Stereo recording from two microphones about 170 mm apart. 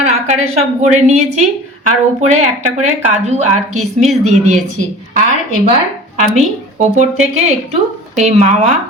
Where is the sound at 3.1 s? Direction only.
45° right (ahead or behind).